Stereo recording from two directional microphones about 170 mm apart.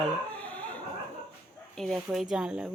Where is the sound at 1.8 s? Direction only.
Centre (ahead or behind).